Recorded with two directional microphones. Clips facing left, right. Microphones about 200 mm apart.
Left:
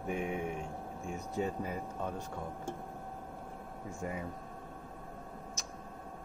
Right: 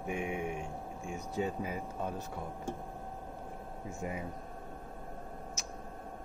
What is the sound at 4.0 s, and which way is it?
Speech, 20° right (ahead or behind).